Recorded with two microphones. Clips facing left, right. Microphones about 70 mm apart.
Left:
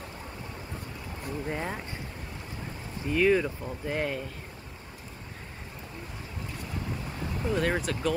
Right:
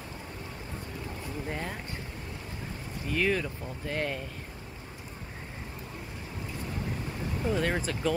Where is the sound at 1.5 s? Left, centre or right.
Centre.